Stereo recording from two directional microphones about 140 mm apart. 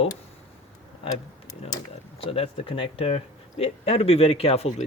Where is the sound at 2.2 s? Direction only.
40° left (ahead or behind).